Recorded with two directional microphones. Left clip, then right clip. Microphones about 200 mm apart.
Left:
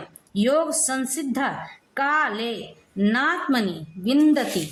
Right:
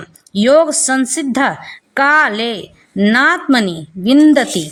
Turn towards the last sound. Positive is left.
turn(degrees=-35)  # may be behind; listen again after turning